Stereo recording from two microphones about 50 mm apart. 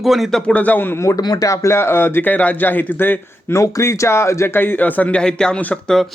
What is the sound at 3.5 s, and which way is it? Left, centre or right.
Speech, left.